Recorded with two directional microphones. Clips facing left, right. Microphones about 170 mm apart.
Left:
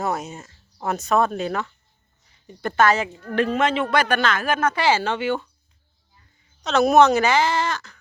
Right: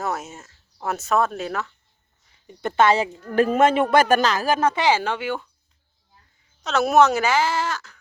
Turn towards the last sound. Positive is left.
turn(degrees=-10)  # may be behind; listen again after turning